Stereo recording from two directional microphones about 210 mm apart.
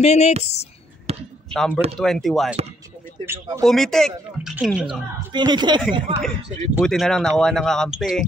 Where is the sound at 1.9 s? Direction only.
Centre (ahead or behind).